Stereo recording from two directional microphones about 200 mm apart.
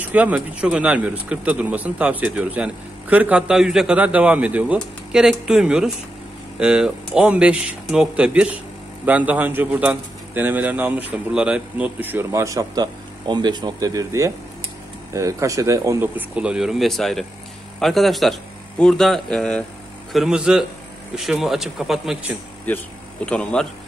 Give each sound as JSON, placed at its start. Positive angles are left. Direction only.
{"t": 0.0, "sound": "a man's voice", "side_deg": -5}
{"t": 22.7, "sound": "speech", "side_deg": 10}